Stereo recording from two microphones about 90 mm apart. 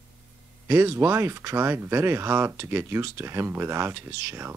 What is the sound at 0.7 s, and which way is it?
Speech, 30° right (ahead or behind).